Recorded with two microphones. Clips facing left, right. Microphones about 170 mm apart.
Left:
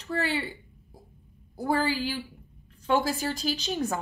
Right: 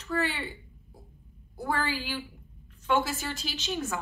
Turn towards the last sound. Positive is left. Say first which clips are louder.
# left 4 dB
turn(degrees=35)  # may be behind; listen again after turning